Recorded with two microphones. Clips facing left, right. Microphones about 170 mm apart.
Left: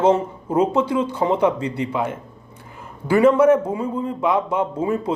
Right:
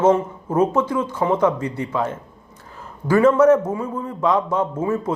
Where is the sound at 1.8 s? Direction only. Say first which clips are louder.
Even; 15° left (ahead or behind).